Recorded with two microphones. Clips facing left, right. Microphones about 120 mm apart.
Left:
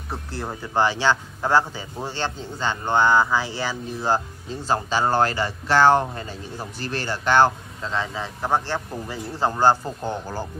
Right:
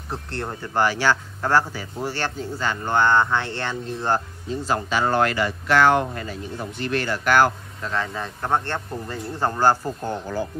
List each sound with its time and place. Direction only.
0.1 s speech: 5° left (ahead or behind)
0.7 s a man's voice: 20° left (ahead or behind)
3.2 s speech: 5° left (ahead or behind)
4.6 s a man's voice: 30° left (ahead or behind)
8.1 s speech: 5° left (ahead or behind)